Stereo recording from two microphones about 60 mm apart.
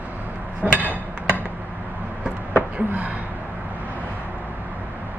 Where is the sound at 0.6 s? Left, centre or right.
Right.